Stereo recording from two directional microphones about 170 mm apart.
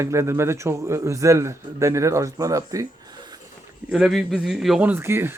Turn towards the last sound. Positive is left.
turn(degrees=-15)  # may be behind; listen again after turning